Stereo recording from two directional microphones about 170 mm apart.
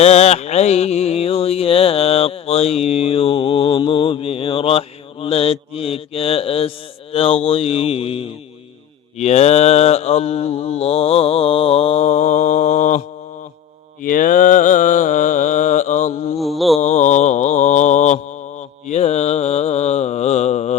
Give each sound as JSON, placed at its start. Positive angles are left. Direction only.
{"t": 0.0, "sound": "a sound", "side_deg": 40}
{"t": 9.1, "sound": "mantra", "side_deg": 40}
{"t": 16.4, "sound": "mantra", "side_deg": 0}
{"t": 16.8, "sound": "mantra", "side_deg": 45}